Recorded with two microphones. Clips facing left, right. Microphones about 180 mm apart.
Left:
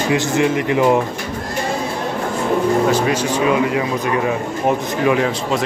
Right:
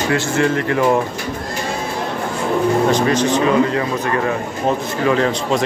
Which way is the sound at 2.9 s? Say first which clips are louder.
Right 2 dB; 10° left (ahead or behind).